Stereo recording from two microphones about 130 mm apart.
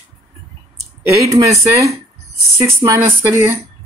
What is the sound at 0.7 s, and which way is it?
Speech, 25° right (ahead or behind).